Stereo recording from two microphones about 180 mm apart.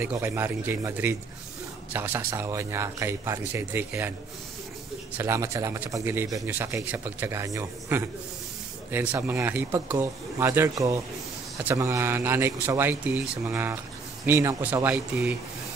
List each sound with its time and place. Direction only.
0.0 s speech: 15° right (ahead or behind)
5.1 s speech: 15° right (ahead or behind)